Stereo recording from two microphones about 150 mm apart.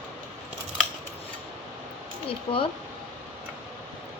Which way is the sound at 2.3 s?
35° left (ahead or behind).